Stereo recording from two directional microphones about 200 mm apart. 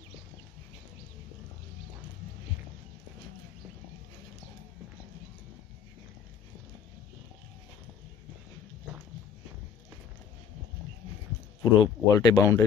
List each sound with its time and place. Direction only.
11.6 s speech: 20° left (ahead or behind)